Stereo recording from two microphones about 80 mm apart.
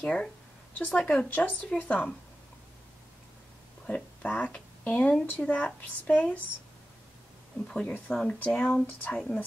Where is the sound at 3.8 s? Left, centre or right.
Centre.